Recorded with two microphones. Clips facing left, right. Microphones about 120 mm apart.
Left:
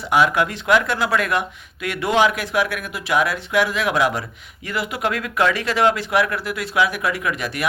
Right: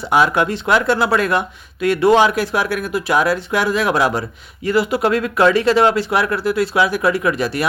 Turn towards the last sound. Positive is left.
turn(degrees=-35)  # may be behind; listen again after turning